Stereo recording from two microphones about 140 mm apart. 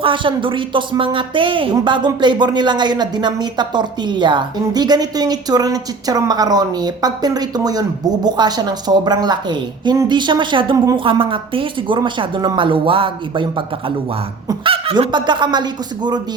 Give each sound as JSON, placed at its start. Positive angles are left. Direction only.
{"t": 0.0, "sound": "a woman's voice", "side_deg": -35}